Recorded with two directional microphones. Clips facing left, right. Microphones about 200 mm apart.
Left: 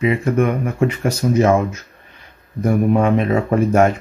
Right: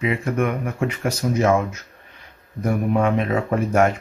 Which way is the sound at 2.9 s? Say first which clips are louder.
Left 4 dB; 30° left (ahead or behind).